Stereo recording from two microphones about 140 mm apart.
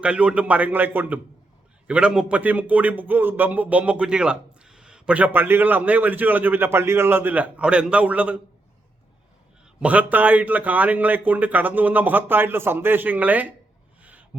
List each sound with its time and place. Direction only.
0.0 s a man's voice: 10° right (ahead or behind)
9.8 s a man's voice: 10° right (ahead or behind)
14.0 s a sound: 10° right (ahead or behind)